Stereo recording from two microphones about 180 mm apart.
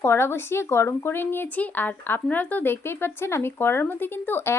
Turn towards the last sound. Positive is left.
turn(degrees=10)  # may be behind; listen again after turning